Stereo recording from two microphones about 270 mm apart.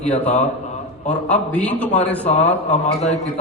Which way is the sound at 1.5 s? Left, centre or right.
Centre.